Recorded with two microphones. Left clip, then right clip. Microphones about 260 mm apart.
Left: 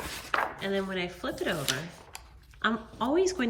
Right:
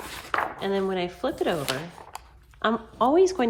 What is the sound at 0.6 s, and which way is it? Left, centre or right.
A woman's voice, centre.